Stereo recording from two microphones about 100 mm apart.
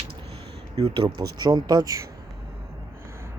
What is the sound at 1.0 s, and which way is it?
Speech, 40° right (ahead or behind).